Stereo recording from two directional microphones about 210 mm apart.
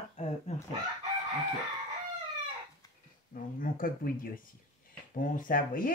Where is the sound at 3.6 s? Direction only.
40° left (ahead or behind).